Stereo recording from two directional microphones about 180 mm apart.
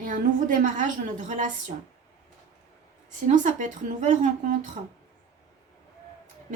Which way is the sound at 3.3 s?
45° right (ahead or behind).